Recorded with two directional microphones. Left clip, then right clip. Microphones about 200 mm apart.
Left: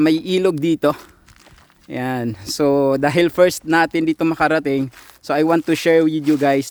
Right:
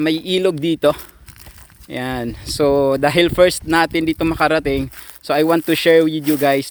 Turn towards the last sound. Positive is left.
turn(degrees=15)  # may be behind; listen again after turning